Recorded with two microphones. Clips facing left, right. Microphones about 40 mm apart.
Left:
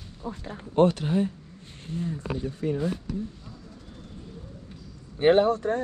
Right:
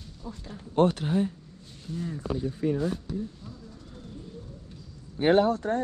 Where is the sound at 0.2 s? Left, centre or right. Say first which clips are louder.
Left 5 dB; left.